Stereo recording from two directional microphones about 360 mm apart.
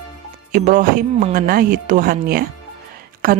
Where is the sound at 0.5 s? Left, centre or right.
Right.